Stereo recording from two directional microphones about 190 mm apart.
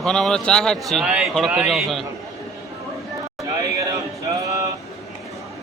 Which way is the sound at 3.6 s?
15° right (ahead or behind).